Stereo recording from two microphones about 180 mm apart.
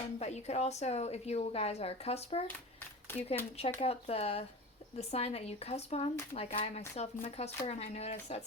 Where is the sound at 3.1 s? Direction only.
10° left (ahead or behind).